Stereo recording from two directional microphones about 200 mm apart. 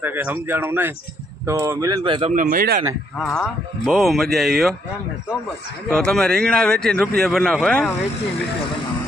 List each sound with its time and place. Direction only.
0.0 s speech: 10° right (ahead or behind); by 2.3 s 25° right (ahead or behind)
2.3 s speech: 40° right (ahead or behind)
3.2 s speech: 5° left (ahead or behind)
5.9 s speech: 5° left (ahead or behind)